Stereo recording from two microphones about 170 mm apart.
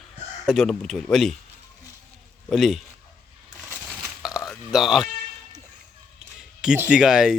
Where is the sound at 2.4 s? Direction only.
Centre (ahead or behind).